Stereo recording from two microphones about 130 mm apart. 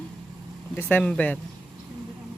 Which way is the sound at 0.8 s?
10° left (ahead or behind).